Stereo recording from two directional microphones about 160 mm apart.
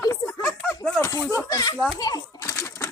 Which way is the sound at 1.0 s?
20° left (ahead or behind).